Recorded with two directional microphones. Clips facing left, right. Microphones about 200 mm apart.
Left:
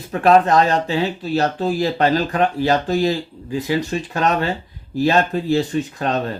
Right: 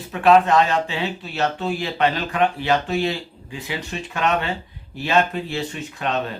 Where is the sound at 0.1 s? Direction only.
40° left (ahead or behind).